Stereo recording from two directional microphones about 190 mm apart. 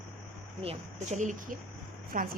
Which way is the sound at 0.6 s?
35° right (ahead or behind).